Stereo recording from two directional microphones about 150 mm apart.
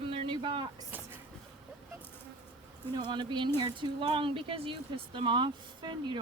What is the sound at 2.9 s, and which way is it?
Speech, 30° right (ahead or behind).